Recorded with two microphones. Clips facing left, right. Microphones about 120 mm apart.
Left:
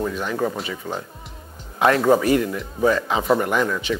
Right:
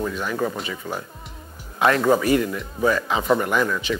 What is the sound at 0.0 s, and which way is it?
Speech, 30° left (ahead or behind).